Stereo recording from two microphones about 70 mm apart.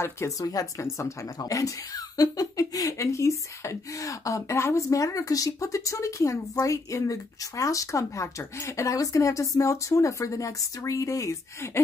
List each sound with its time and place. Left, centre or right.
0.4 s speech: left
1.4 s speech: left
11.6 s a sound: left